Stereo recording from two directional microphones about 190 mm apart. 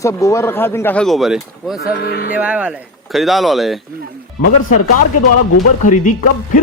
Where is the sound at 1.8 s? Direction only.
55° left (ahead or behind).